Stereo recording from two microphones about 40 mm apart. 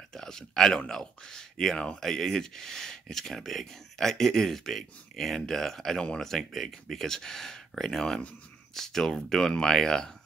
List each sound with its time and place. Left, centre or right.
0.1 s speech: centre